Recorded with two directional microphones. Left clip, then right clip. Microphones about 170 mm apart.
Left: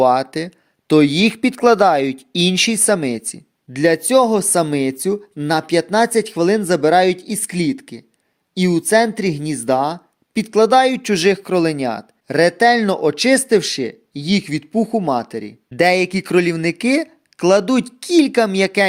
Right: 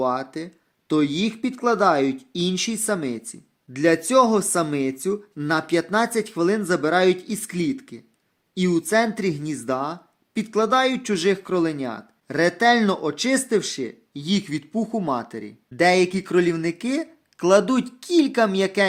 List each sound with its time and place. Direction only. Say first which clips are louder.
0.0 s speech: left 10 dB; 45° left (ahead or behind); by 15.5 s 25° left (ahead or behind)
15.7 s speech: left 3 dB; 35° left (ahead or behind)